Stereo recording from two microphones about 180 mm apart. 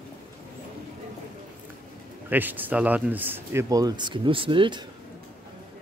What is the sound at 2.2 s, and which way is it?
Speech, 10° right (ahead or behind).